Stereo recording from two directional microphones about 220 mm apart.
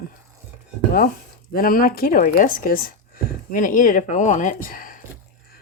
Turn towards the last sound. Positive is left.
turn(degrees=40)  # may be behind; listen again after turning